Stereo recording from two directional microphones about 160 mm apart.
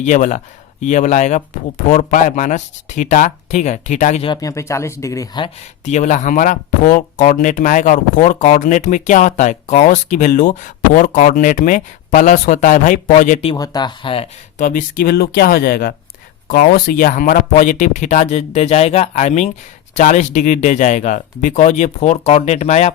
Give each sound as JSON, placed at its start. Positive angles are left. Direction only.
{"t": 0.0, "sound": "speech", "side_deg": 50}
{"t": 4.3, "sound": "speech", "side_deg": 20}
{"t": 5.8, "sound": "speech", "side_deg": 50}
{"t": 13.6, "sound": "speech", "side_deg": 25}
{"t": 14.6, "sound": "speech", "side_deg": 55}